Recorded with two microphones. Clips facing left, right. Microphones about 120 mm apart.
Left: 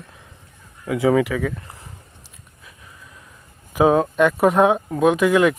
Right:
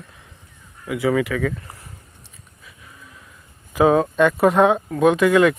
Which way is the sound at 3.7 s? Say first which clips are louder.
Even; 15° left (ahead or behind).